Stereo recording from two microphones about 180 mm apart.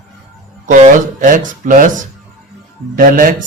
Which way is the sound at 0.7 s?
45° right (ahead or behind).